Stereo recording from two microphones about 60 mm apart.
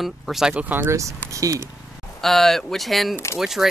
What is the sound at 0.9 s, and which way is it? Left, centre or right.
Speech, right.